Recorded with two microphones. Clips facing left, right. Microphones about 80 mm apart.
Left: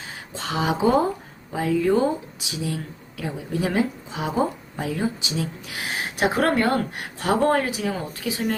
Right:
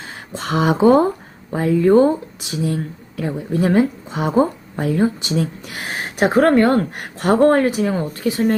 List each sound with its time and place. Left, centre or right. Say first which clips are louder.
0.3 s speech: right 7 dB; right
7.2 s speech: right 7 dB; right